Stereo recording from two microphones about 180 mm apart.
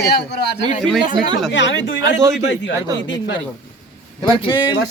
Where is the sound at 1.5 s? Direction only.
85° left.